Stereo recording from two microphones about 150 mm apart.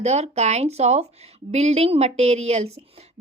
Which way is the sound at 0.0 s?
45° right (ahead or behind).